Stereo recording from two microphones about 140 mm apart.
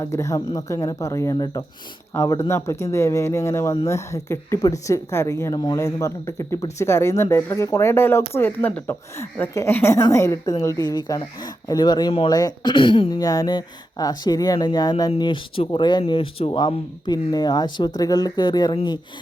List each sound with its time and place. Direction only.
0.0 s speech: 20° left (ahead or behind)